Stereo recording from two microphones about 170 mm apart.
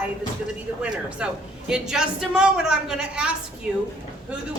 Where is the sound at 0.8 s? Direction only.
5° right (ahead or behind).